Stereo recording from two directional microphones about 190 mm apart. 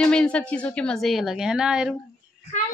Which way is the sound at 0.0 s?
5° left (ahead or behind).